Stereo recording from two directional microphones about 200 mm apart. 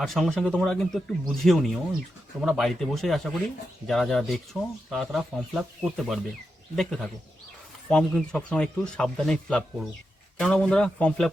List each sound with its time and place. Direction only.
0.0 s speech: centre (ahead or behind)